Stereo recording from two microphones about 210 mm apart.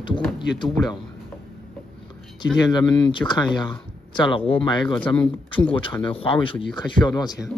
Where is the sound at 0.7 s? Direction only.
Centre (ahead or behind).